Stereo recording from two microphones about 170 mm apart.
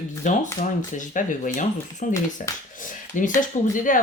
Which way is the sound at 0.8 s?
50° left (ahead or behind).